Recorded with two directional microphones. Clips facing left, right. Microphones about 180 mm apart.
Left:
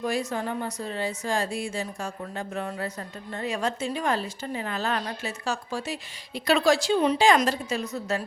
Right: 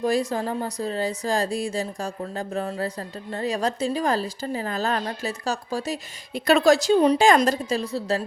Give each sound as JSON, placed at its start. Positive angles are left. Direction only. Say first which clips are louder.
{"t": 0.0, "sound": "speech", "louder": "right 5 dB", "side_deg": -35}